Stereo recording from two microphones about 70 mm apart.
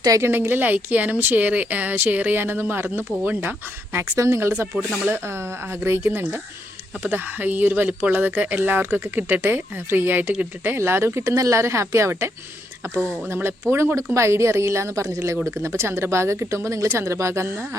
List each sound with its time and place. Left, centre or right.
0.2 s speech: right
4.1 s a woman's voice: right